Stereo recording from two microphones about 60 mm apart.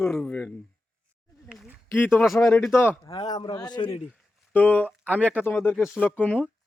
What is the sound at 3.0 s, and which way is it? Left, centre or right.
Speech, left.